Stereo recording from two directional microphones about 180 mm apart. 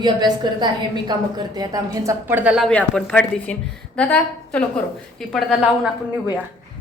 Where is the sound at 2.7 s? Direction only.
5° left (ahead or behind).